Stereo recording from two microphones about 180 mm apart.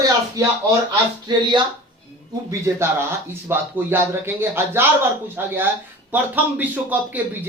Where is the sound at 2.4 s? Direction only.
15° right (ahead or behind).